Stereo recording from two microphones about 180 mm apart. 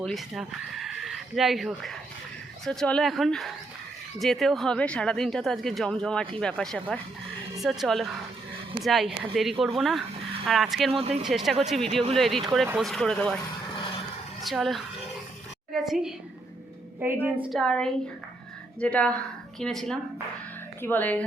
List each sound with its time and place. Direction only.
0.0 s speech: centre (ahead or behind)
10.9 s speech: 30° right (ahead or behind)
11.3 s speech: centre (ahead or behind)
14.4 s a woman's voice: centre (ahead or behind)
17.0 s a woman's voice: 15° right (ahead or behind)
17.5 s a woman's voice: 5° left (ahead or behind)